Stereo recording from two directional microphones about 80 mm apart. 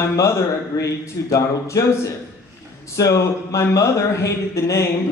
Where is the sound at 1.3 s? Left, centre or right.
Left.